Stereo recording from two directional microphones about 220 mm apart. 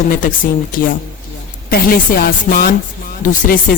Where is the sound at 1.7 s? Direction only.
40° left (ahead or behind).